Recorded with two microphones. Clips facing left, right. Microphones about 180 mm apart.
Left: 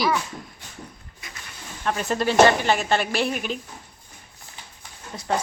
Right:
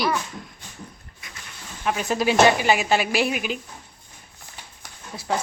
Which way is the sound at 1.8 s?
5° right (ahead or behind).